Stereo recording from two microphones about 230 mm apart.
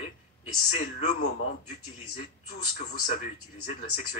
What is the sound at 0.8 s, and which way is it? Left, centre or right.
Speech, left.